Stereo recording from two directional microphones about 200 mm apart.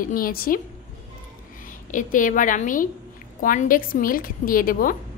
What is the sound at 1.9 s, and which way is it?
A woman's voice, 40° left (ahead or behind).